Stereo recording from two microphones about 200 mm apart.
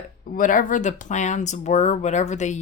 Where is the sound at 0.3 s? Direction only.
40° left (ahead or behind).